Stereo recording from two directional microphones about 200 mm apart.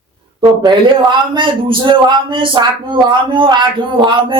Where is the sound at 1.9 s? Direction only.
25° right (ahead or behind).